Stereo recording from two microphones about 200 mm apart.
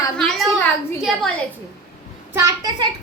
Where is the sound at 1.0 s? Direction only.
Centre (ahead or behind).